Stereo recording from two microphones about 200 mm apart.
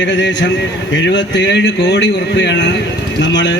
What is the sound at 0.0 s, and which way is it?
A man's voice, 60° left (ahead or behind).